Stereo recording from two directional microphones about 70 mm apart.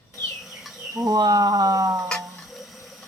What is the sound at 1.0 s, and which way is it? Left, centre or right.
Speech, right.